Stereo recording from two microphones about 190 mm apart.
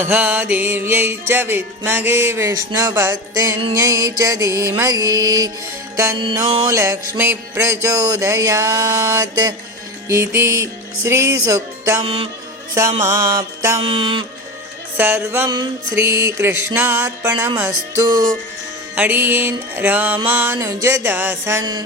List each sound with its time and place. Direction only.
0.0 s mantra: 10° right (ahead or behind)
12.0 s music: 30° right (ahead or behind)
12.7 s mantra: 15° right (ahead or behind)
13.8 s music: 25° right (ahead or behind)
14.9 s mantra: 10° right (ahead or behind)